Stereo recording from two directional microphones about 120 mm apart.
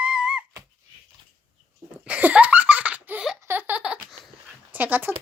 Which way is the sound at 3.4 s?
15° right (ahead or behind).